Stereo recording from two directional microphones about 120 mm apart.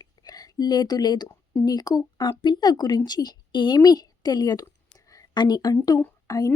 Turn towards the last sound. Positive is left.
turn(degrees=30)  # may be behind; listen again after turning